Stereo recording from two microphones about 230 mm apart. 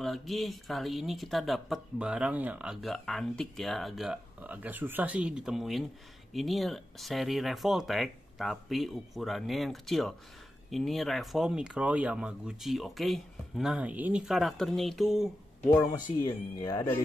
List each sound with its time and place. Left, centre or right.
0.0 s speech: centre
15.7 s speech: centre